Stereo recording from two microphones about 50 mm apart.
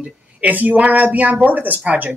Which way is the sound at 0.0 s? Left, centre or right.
Right.